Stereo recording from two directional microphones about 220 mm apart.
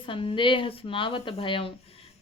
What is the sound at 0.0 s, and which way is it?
Speech, 25° left (ahead or behind).